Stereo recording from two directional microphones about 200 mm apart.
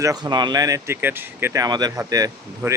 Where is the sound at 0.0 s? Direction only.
20° right (ahead or behind).